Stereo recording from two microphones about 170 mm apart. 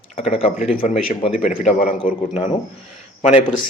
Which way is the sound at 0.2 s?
35° left (ahead or behind).